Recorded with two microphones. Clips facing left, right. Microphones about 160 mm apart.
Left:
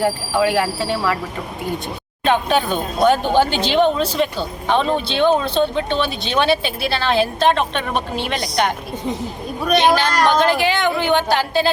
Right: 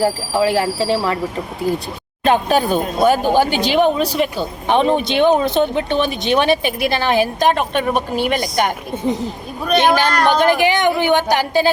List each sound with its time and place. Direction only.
0.0 s speech: 30° right (ahead or behind)
2.2 s speech: 40° right (ahead or behind)
2.7 s speech: 10° right (ahead or behind)
9.9 s speech: 15° right (ahead or behind)